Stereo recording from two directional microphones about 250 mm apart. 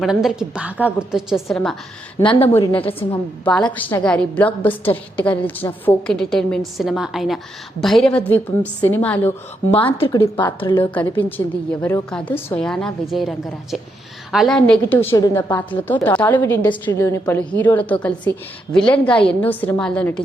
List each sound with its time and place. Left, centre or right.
0.0 s a woman's voice: centre
2.2 s speech: left
3.4 s a woman's voice: centre
9.7 s speech: left
10.9 s a woman's voice: centre